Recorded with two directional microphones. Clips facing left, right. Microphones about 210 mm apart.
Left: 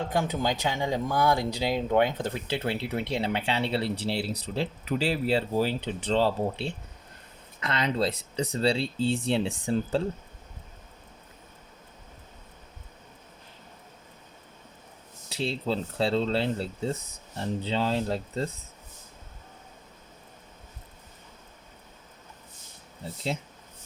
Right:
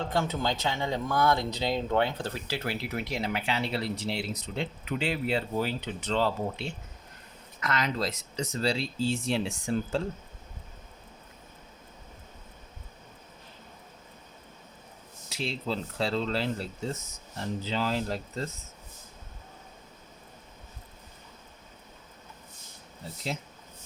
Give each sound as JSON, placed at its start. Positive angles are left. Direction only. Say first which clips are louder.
{"t": 0.1, "sound": "speech", "louder": "left 2 dB", "side_deg": 15}
{"t": 15.3, "sound": "speech", "louder": "left 3 dB", "side_deg": 35}